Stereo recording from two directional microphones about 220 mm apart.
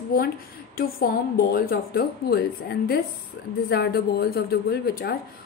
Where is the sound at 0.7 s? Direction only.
45° left (ahead or behind).